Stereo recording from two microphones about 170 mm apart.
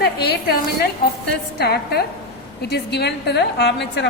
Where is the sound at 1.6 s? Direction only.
70° left (ahead or behind).